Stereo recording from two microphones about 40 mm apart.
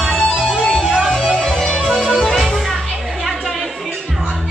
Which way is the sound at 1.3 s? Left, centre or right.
Centre.